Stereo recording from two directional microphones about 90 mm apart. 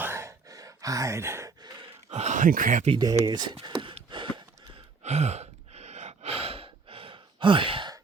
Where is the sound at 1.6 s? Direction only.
50° right (ahead or behind).